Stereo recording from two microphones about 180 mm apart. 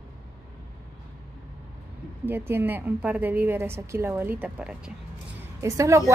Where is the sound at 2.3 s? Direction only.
10° right (ahead or behind).